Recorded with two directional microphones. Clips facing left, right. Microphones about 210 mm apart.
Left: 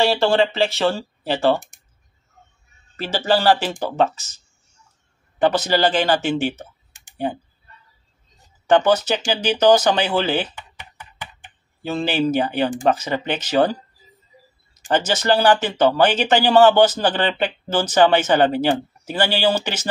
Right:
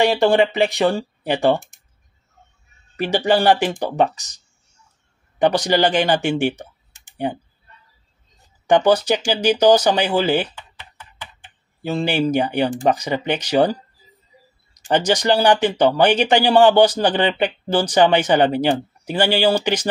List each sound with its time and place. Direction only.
0.0 s a man's voice: 15° right (ahead or behind)
3.0 s a man's voice: 15° right (ahead or behind)
5.4 s a man's voice: 15° right (ahead or behind)
8.6 s a man's voice: 15° right (ahead or behind)
10.5 s a sound: 15° left (ahead or behind)
11.8 s a man's voice: 15° right (ahead or behind)